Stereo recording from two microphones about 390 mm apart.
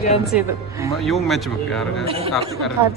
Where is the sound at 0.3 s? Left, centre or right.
Centre.